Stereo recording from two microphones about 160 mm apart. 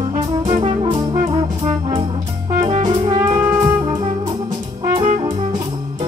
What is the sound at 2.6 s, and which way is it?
Music, 30° right (ahead or behind).